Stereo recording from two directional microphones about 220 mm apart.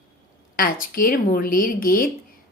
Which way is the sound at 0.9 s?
40° left (ahead or behind).